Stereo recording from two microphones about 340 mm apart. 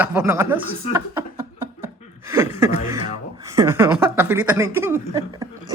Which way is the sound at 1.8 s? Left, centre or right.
Centre.